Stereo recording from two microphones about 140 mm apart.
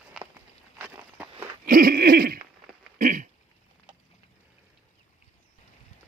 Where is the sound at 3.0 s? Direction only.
70° right (ahead or behind).